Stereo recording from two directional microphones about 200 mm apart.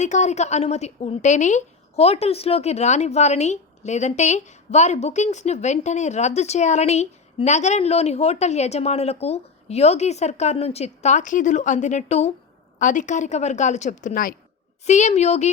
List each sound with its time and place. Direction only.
0.0 s a woman's voice: 35° left (ahead or behind)